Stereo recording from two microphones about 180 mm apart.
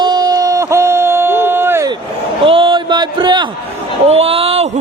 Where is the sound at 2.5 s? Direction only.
30° right (ahead or behind).